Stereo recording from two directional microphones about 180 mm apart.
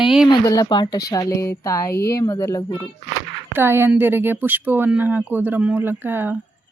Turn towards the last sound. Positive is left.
turn(degrees=-10)  # may be behind; listen again after turning